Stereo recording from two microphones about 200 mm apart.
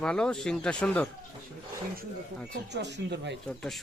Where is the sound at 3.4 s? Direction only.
5° left (ahead or behind).